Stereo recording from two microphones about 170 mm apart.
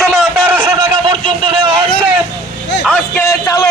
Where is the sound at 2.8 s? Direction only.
10° left (ahead or behind).